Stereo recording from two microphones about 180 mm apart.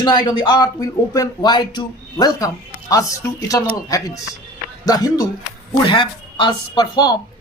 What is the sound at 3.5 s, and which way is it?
Speech, 20° left (ahead or behind).